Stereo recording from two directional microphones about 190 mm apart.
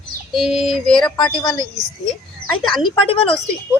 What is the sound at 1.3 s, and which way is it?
Speech, 25° left (ahead or behind).